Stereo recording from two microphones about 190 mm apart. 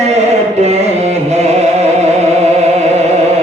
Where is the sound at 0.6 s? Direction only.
35° right (ahead or behind).